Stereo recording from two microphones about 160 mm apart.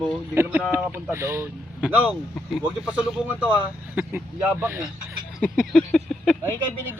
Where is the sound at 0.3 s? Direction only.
15° right (ahead or behind).